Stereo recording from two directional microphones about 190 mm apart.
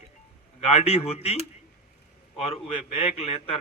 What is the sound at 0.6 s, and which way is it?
Speech, 35° left (ahead or behind).